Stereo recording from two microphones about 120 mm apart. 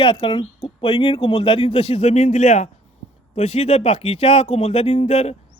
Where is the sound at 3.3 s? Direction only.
60° left (ahead or behind).